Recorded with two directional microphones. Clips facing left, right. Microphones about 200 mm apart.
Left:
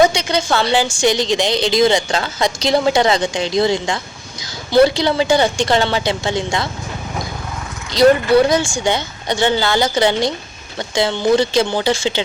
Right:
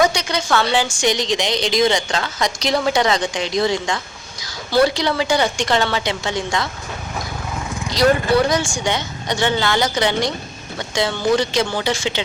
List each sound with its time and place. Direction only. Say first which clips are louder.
0.0 s a woman's voice: left 4 dB; 25° left (ahead or behind)
7.9 s a woman's voice: left 5 dB; 25° left (ahead or behind)